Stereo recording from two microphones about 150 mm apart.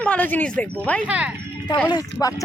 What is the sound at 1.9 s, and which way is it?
Speech, 25° left (ahead or behind).